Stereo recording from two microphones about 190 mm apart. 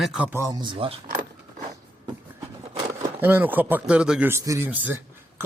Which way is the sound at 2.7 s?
10° right (ahead or behind).